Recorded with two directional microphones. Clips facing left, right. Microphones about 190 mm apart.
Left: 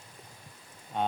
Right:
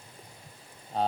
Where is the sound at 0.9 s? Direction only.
35° right (ahead or behind).